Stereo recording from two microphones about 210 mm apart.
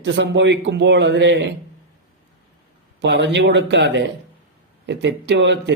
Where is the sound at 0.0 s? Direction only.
60° right (ahead or behind).